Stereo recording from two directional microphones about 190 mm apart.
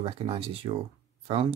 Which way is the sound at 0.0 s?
30° right (ahead or behind).